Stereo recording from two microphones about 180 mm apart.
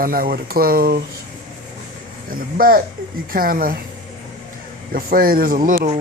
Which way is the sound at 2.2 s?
55° right (ahead or behind).